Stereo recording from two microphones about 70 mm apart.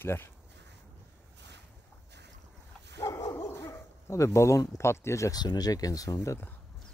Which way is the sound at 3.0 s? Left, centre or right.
Left.